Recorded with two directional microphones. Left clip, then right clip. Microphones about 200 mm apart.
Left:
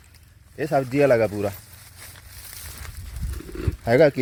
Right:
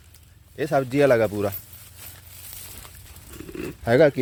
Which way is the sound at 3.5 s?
60° right (ahead or behind).